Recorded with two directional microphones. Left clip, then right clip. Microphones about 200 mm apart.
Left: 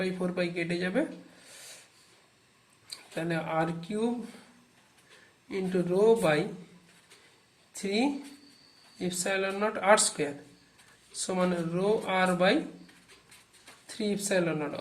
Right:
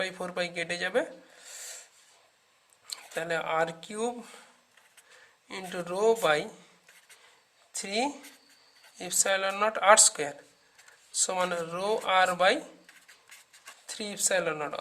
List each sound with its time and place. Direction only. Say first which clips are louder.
0.0 s speech: left 1 dB; 50° right (ahead or behind)
3.2 s speech: right 2 dB; 50° right (ahead or behind)
5.5 s speech: left 5 dB; 50° right (ahead or behind)
7.7 s speech: left 1 dB; 50° right (ahead or behind)
11.3 s speech: left 1 dB; 50° right (ahead or behind)
13.8 s speech: even; 50° right (ahead or behind)